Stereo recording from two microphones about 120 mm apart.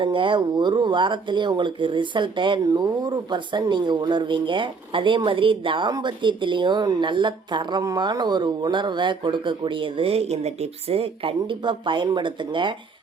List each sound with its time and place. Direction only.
0.0 s speech: 45° right (ahead or behind)